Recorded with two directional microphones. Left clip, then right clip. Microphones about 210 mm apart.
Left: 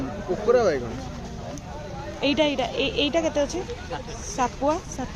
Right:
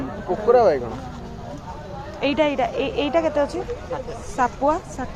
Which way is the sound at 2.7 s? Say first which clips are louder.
Right 1 dB; 25° right (ahead or behind).